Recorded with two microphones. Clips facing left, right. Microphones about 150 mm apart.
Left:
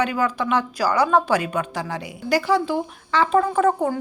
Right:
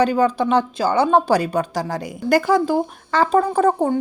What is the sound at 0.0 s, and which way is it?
Speech, 30° right (ahead or behind).